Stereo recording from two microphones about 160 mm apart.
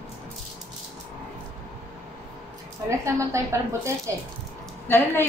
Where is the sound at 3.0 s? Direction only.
20° right (ahead or behind).